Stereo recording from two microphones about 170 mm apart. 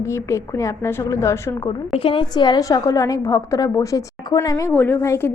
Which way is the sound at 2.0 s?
30° left (ahead or behind).